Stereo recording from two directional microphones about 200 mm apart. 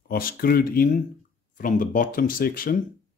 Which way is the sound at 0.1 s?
45° left (ahead or behind).